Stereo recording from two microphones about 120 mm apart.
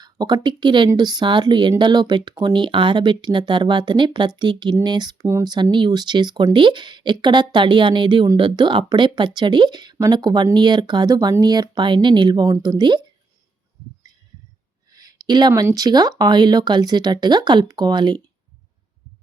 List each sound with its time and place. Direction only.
0.0 s speech: 35° right (ahead or behind)
5.2 s speech: 25° right (ahead or behind)
5.7 s speech: 35° right (ahead or behind)
14.9 s a sound: 35° right (ahead or behind)
15.7 s speech: 35° right (ahead or behind)